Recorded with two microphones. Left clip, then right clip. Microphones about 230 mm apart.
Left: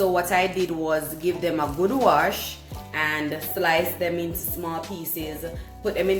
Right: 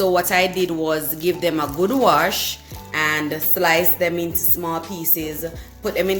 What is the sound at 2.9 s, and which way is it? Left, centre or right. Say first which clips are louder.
Music: right 5 dB; right.